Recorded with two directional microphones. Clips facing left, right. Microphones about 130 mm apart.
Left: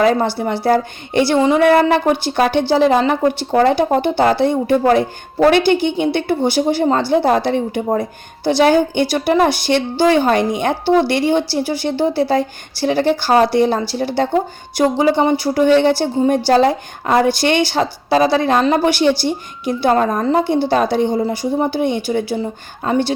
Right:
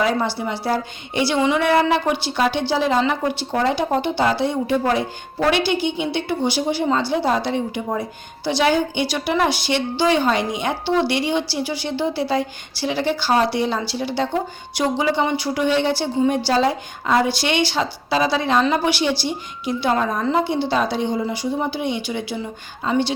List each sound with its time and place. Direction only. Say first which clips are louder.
0.3 s a woman's voice: left 7 dB; 50° left (ahead or behind)
1.4 s a woman's voice: left 5 dB; 40° left (ahead or behind)